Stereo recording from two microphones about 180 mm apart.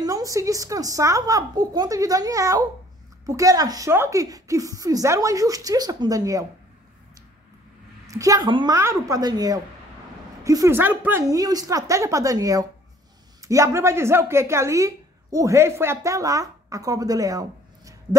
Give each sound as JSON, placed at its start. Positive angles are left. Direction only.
{"t": 0.0, "sound": "a woman's voice", "side_deg": -20}
{"t": 8.1, "sound": "a woman's voice", "side_deg": -20}